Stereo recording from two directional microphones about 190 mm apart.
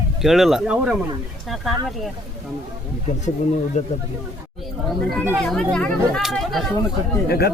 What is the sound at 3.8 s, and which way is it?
Speech, 40° left (ahead or behind).